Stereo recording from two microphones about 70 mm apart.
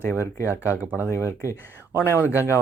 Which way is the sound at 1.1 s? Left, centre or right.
Left.